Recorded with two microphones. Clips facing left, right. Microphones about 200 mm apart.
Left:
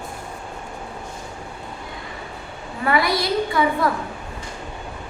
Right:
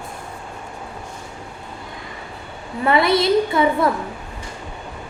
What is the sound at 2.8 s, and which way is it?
A woman's voice, 25° right (ahead or behind).